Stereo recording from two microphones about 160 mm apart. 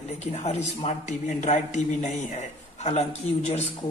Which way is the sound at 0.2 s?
40° left (ahead or behind).